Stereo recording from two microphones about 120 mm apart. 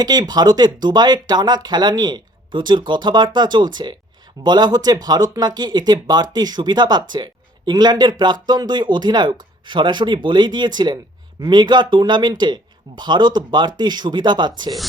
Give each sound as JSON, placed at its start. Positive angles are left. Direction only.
{"t": 0.0, "sound": "speech", "side_deg": -35}